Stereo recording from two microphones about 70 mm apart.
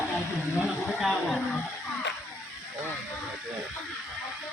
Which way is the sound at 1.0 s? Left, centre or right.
Centre.